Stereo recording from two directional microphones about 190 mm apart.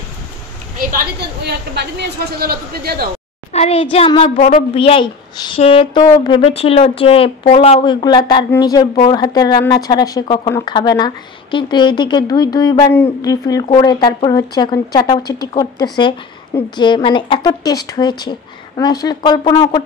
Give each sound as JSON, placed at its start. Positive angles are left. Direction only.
{"t": 0.7, "sound": "a woman's voice", "side_deg": -55}
{"t": 3.5, "sound": "speech", "side_deg": 30}
{"t": 4.4, "sound": "speech", "side_deg": 50}
{"t": 4.7, "sound": "speech", "side_deg": 30}